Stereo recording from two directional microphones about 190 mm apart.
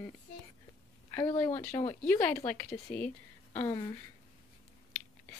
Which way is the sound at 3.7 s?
25° left (ahead or behind).